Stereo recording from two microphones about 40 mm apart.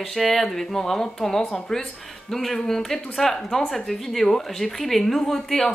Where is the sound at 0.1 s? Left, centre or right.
Centre.